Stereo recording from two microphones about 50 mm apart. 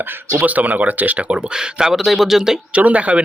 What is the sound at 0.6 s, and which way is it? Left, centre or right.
Speech, right.